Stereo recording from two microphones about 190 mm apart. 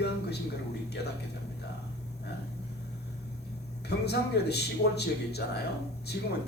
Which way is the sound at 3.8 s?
60° left (ahead or behind).